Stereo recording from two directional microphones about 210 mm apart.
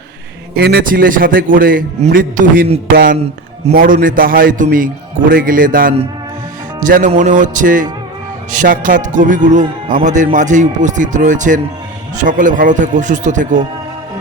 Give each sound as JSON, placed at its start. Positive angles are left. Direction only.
{"t": 0.5, "sound": "a man's voice", "side_deg": -50}
{"t": 2.9, "sound": "a sound", "side_deg": -40}
{"t": 3.7, "sound": "a man's voice", "side_deg": -40}